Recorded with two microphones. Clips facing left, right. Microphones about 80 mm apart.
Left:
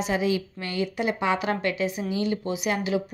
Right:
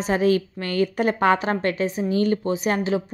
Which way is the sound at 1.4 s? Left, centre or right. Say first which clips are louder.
Right 3 dB; right.